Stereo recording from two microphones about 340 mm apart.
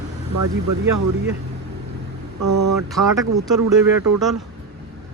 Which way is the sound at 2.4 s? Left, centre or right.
Right.